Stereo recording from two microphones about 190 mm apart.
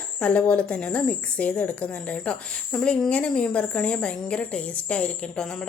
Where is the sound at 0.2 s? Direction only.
5° left (ahead or behind).